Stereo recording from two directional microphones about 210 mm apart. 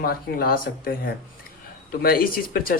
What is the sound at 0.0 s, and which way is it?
Speech, 45° left (ahead or behind).